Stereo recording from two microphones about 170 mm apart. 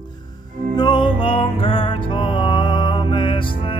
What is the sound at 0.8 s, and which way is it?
Music, 25° left (ahead or behind).